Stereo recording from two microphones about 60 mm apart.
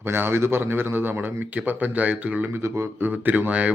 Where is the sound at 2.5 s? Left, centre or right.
Right.